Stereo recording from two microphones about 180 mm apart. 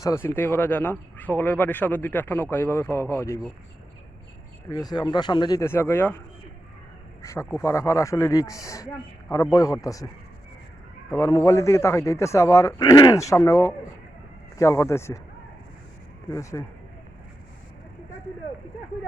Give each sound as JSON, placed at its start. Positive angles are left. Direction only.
{"t": 0.0, "sound": "speech", "side_deg": 15}
{"t": 4.7, "sound": "speech", "side_deg": 20}
{"t": 11.2, "sound": "speech", "side_deg": 15}
{"t": 16.3, "sound": "speech", "side_deg": 15}